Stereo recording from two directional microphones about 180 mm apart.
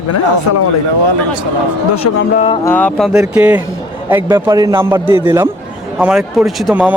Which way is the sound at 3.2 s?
10° right (ahead or behind).